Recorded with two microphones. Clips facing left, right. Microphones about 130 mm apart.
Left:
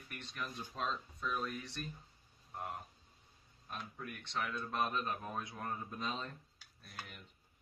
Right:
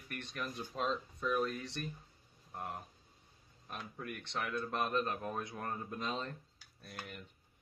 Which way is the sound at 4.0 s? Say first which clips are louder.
Right 1 dB; 50° right (ahead or behind).